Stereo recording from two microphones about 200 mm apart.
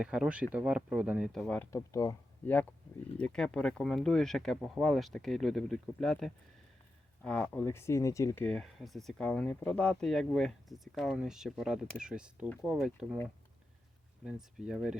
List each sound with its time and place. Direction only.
0.0 s speech: 5° right (ahead or behind)
1.7 s speech: 15° left (ahead or behind)
2.5 s speech: 5° left (ahead or behind)
14.3 s speech: 5° right (ahead or behind)